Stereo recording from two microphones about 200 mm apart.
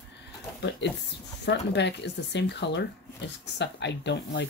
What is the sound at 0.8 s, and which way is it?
Speech, 60° left (ahead or behind).